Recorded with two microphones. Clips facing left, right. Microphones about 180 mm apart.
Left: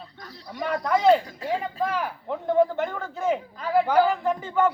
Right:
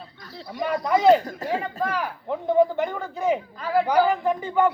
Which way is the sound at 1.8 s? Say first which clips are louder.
Even; centre (ahead or behind).